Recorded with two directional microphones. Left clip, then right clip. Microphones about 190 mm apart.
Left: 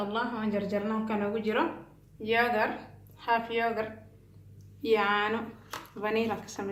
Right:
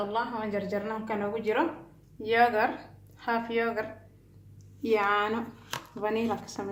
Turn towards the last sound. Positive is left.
turn(degrees=-30)  # may be behind; listen again after turning